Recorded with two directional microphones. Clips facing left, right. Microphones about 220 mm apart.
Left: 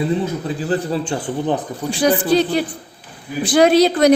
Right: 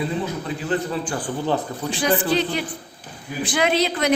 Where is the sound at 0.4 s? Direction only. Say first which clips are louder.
Left 4 dB; 35° left (ahead or behind).